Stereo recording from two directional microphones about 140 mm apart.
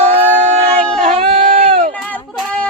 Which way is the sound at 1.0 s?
50° right (ahead or behind).